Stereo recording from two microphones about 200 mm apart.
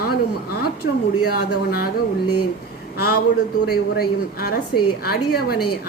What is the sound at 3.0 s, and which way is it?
A woman's voice, 50° left (ahead or behind).